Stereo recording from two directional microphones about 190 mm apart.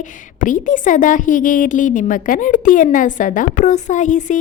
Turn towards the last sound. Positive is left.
turn(degrees=40)  # may be behind; listen again after turning